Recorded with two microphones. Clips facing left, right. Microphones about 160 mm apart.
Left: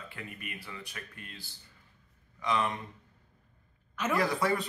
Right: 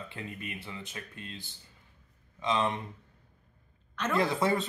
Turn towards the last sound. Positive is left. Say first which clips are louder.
# right 1 dB
turn(degrees=-25)  # may be behind; listen again after turning